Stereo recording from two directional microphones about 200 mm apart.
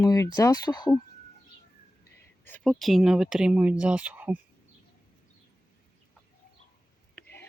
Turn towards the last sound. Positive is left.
turn(degrees=10)  # may be behind; listen again after turning